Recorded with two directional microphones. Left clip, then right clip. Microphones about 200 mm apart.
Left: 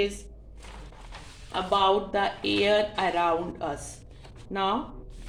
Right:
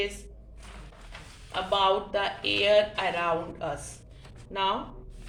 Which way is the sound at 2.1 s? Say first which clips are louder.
Left 1 dB; 50° left (ahead or behind).